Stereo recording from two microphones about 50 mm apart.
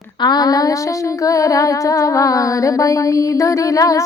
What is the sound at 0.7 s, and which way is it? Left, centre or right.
Music, left.